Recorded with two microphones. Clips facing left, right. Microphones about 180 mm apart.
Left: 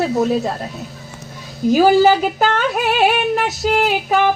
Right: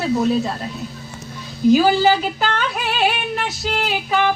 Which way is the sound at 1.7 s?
45° left (ahead or behind).